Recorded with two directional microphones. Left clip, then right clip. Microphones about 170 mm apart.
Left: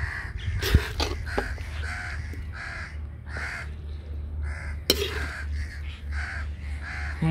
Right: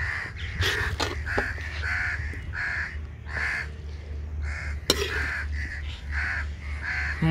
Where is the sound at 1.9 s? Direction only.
65° left (ahead or behind).